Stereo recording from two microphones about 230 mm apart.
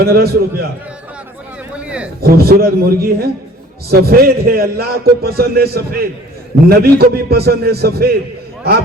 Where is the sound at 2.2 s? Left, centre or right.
Right.